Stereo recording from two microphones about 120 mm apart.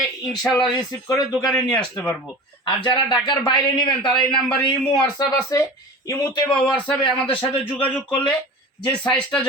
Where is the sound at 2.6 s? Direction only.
40° left (ahead or behind).